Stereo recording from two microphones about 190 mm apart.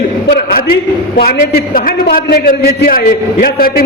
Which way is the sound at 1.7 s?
45° left (ahead or behind).